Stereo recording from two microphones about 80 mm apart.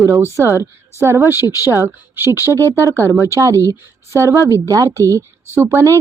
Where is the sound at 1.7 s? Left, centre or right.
Right.